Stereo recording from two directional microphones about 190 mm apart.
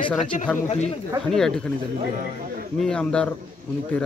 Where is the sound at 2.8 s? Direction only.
5° left (ahead or behind).